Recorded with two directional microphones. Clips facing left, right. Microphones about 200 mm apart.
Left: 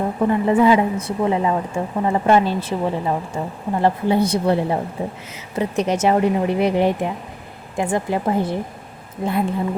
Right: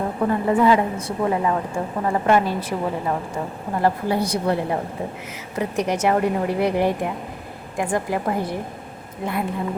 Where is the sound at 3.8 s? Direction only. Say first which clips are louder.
Left 3 dB; 25° left (ahead or behind).